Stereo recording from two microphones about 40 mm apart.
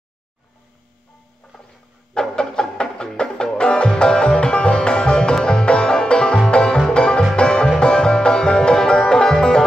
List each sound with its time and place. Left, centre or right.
2.1 s music: centre